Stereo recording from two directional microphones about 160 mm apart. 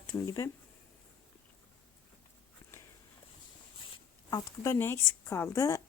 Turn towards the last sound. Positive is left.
turn(degrees=20)  # may be behind; listen again after turning